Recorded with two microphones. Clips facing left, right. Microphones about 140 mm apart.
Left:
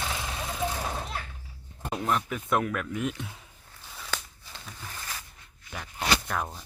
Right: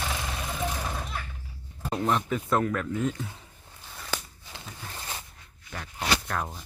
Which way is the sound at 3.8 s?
5° right (ahead or behind).